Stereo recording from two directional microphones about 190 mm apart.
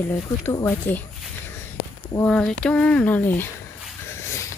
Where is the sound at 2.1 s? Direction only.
10° left (ahead or behind).